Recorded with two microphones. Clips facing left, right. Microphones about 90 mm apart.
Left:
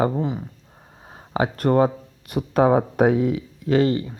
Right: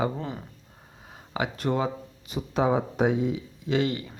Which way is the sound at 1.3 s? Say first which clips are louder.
Left 8 dB; 45° left (ahead or behind).